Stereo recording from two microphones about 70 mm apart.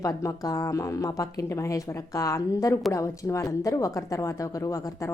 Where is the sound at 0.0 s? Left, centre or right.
Left.